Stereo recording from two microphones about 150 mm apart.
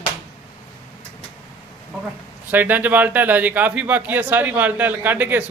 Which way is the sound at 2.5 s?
10° right (ahead or behind).